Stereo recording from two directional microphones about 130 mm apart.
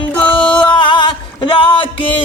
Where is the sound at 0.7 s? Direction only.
40° left (ahead or behind).